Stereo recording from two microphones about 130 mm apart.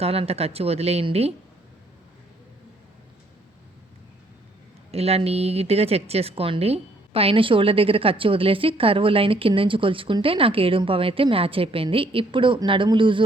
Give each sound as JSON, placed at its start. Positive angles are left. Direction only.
{"t": 0.0, "sound": "speech", "side_deg": -50}
{"t": 4.9, "sound": "speech", "side_deg": -50}